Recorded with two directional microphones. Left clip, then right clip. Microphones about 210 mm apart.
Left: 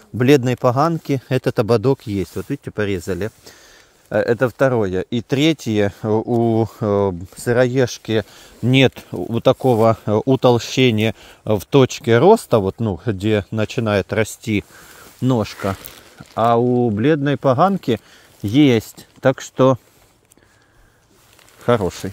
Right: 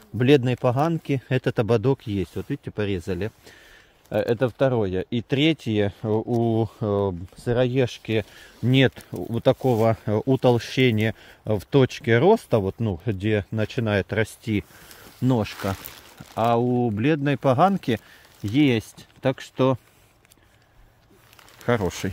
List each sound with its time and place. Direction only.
0.2 s speech: 30° left (ahead or behind)
4.1 s speech: 35° left (ahead or behind); by 18.0 s 20° left (ahead or behind)
18.4 s speech: 35° left (ahead or behind)
21.7 s speech: 25° left (ahead or behind)
22.0 s speech: 10° right (ahead or behind)